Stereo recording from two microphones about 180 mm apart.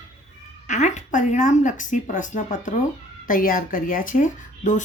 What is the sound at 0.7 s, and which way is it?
Speech, 40° left (ahead or behind).